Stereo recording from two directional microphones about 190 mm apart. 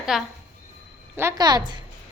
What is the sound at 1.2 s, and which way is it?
Speech, 15° right (ahead or behind).